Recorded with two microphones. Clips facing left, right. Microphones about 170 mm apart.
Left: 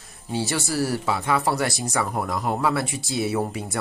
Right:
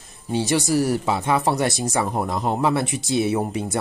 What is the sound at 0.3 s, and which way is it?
Speech, 20° right (ahead or behind).